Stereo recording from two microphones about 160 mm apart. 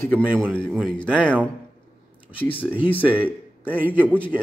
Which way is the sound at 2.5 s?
35° left (ahead or behind).